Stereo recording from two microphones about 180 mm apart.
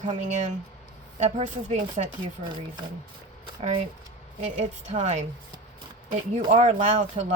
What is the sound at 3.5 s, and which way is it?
Speech, 35° right (ahead or behind).